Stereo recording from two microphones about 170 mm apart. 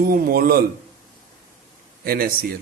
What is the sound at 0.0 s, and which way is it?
Speech, 60° right (ahead or behind).